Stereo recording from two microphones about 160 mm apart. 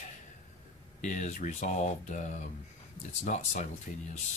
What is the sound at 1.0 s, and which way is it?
Speech, 50° left (ahead or behind).